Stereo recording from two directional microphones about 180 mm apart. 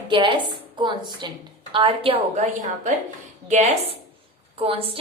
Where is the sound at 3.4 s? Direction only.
40° right (ahead or behind).